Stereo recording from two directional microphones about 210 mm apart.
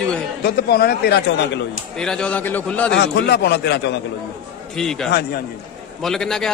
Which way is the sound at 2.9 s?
55° left (ahead or behind).